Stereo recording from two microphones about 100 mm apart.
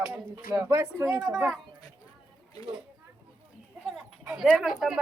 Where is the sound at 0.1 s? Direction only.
25° right (ahead or behind).